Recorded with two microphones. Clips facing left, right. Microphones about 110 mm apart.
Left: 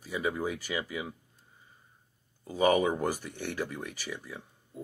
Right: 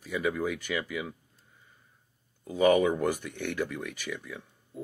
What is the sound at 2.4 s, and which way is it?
Speech, 30° left (ahead or behind).